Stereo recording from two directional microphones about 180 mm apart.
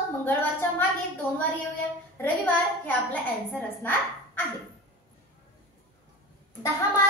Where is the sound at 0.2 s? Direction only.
10° left (ahead or behind).